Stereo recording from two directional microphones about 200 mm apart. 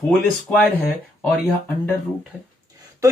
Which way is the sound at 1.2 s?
5° left (ahead or behind).